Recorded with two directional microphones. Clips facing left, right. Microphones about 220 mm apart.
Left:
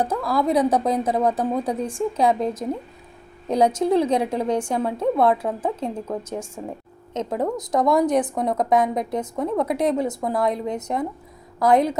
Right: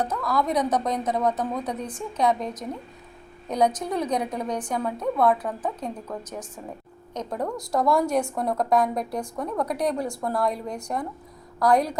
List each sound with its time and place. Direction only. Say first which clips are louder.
0.0 s a woman's voice: left 4 dB; 30° left (ahead or behind)